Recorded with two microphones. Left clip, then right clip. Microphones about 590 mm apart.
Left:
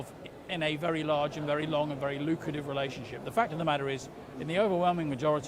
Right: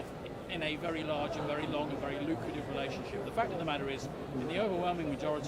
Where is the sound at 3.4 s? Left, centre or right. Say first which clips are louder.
Left 6 dB; left.